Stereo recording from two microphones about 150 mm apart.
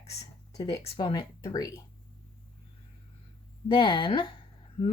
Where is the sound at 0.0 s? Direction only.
45° left (ahead or behind).